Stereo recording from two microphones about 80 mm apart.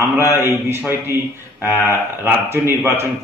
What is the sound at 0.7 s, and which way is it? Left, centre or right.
A man's voice, right.